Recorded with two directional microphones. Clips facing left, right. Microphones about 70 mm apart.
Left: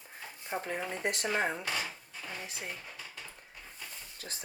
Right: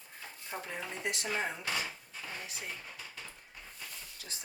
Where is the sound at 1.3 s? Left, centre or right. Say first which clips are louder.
Left 2 dB; left.